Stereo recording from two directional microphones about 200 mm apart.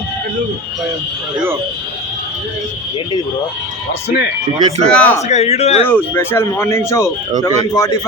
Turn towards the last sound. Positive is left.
turn(degrees=15)  # may be behind; listen again after turning